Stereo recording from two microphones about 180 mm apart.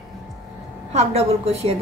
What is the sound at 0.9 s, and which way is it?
Speech, 35° right (ahead or behind).